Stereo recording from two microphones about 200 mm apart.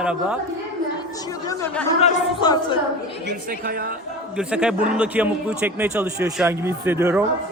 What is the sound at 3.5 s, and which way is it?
Speech, 45° right (ahead or behind).